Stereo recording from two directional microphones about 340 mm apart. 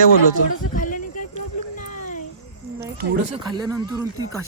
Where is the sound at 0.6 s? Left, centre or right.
Left.